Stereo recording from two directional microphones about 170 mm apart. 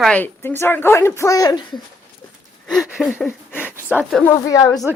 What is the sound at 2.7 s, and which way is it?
Speech, centre (ahead or behind).